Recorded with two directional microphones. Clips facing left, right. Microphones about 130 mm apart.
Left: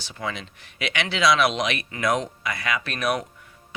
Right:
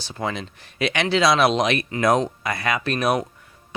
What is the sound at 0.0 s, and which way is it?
Speech, 35° right (ahead or behind).